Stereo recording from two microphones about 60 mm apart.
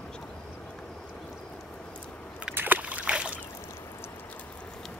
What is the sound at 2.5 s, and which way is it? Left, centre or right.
Boat, right.